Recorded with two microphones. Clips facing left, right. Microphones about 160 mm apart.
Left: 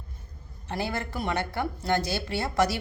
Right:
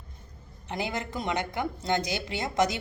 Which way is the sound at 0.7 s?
20° right (ahead or behind).